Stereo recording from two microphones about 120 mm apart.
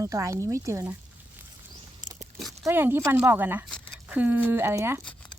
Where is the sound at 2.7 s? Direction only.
20° right (ahead or behind).